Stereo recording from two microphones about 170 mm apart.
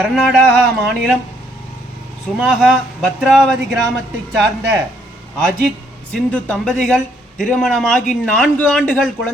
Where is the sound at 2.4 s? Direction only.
Centre (ahead or behind).